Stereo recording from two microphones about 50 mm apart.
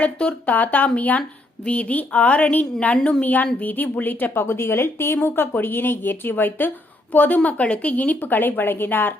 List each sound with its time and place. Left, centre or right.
0.0 s a woman's voice: left
0.5 s a woman's voice: left
2.9 s a woman's voice: centre
3.2 s a woman's voice: left